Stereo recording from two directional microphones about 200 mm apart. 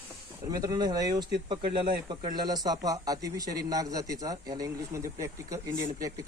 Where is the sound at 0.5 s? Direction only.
20° right (ahead or behind).